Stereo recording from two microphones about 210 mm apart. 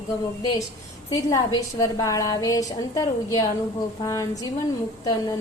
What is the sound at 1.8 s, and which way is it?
A woman's voice, 15° left (ahead or behind).